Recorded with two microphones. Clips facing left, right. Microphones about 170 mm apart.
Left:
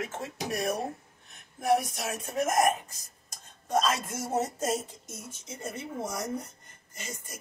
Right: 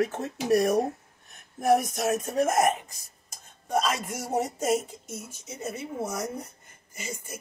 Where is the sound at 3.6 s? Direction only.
10° right (ahead or behind).